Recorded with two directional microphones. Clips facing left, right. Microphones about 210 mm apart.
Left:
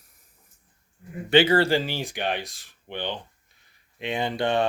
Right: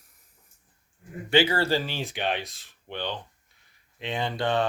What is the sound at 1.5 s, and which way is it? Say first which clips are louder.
Speech: left 4 dB; 15° left (ahead or behind).